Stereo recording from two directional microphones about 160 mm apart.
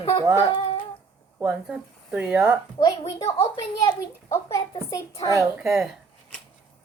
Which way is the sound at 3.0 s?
35° left (ahead or behind).